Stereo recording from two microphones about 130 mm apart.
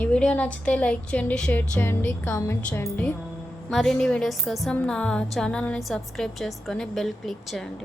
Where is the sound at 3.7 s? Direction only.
Centre (ahead or behind).